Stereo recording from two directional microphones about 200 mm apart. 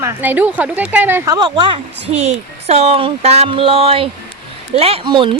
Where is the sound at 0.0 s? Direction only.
10° right (ahead or behind).